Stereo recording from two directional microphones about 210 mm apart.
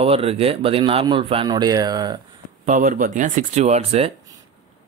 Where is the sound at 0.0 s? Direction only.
30° right (ahead or behind).